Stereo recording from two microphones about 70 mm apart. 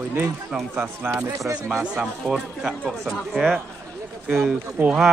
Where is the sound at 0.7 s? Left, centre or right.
Right.